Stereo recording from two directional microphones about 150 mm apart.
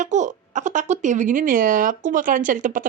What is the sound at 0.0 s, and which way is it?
Speech, 55° right (ahead or behind).